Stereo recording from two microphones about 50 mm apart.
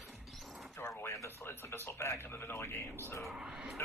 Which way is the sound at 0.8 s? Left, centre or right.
Left.